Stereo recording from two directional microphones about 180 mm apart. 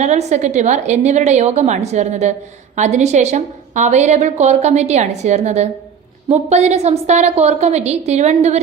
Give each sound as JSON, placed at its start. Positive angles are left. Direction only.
{"t": 0.0, "sound": "a woman's voice", "side_deg": -40}